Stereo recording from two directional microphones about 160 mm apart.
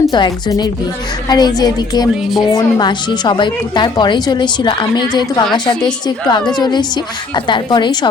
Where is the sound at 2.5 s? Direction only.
25° left (ahead or behind).